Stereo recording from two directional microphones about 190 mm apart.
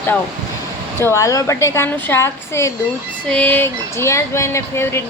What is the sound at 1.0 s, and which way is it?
Speech, 15° left (ahead or behind).